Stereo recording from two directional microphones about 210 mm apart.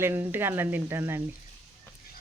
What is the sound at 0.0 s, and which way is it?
Speech, 10° right (ahead or behind).